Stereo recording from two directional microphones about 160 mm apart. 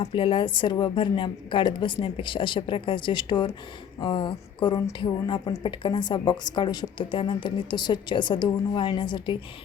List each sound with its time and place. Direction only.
0.0 s a woman's voice: 35° left (ahead or behind)